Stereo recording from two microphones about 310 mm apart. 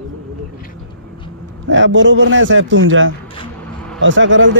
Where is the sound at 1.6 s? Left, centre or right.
Right.